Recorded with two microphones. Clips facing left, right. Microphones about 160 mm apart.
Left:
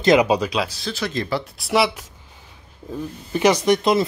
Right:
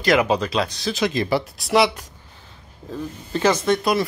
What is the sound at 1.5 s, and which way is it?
Speech, centre (ahead or behind).